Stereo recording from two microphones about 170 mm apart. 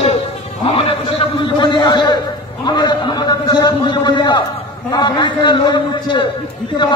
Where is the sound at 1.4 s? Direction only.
30° left (ahead or behind).